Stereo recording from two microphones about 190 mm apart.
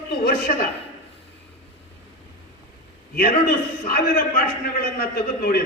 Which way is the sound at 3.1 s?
50° left (ahead or behind).